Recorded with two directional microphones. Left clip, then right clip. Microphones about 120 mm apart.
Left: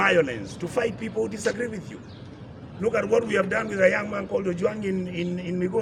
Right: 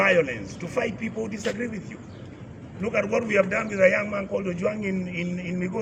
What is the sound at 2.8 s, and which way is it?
A man's voice, 20° left (ahead or behind).